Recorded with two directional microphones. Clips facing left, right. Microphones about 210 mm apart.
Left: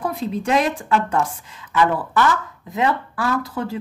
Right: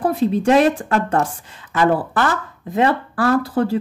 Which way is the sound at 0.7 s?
50° right (ahead or behind).